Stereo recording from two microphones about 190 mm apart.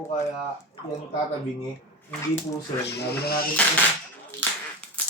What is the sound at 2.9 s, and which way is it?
Speech, 60° left (ahead or behind).